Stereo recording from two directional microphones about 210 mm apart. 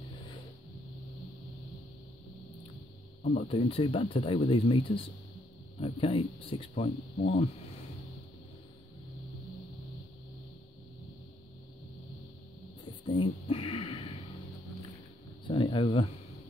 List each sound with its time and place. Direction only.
3.3 s speech: 25° left (ahead or behind)
13.0 s speech: 25° left (ahead or behind)
15.4 s speech: 25° left (ahead or behind)